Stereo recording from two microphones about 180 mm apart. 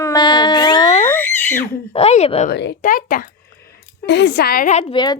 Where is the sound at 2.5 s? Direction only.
70° left (ahead or behind).